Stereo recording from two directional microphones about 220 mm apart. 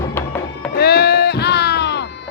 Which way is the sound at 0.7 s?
45° left (ahead or behind).